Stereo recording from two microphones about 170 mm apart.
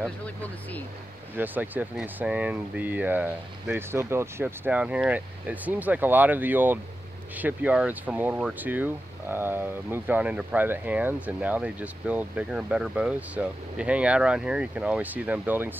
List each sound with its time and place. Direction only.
0.0 s speech: 10° left (ahead or behind)
1.3 s speech: 10° right (ahead or behind)